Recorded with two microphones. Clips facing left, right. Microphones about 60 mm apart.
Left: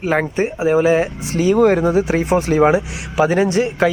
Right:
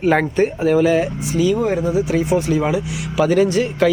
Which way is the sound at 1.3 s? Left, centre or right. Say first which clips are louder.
Left 1 dB; left.